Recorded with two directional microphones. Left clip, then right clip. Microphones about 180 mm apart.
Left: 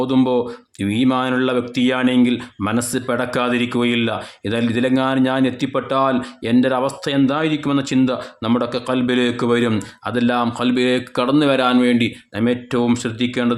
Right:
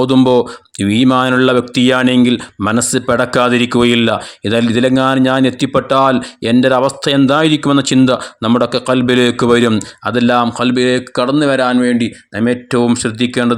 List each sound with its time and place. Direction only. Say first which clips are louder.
0.0 s speech: right 7 dB; 35° right (ahead or behind)